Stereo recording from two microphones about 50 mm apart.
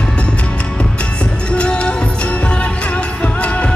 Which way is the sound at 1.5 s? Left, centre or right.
Left.